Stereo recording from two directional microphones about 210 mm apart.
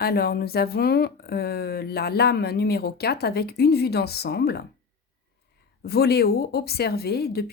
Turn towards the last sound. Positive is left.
turn(degrees=50)  # may be behind; listen again after turning